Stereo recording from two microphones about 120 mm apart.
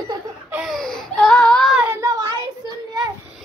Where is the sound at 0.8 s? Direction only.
5° left (ahead or behind).